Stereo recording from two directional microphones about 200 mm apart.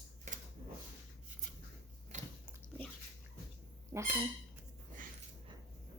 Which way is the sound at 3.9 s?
10° right (ahead or behind).